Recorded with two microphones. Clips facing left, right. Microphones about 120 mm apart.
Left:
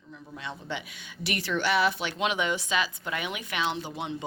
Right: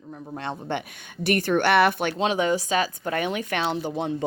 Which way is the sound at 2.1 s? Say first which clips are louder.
Right 5 dB; 40° right (ahead or behind).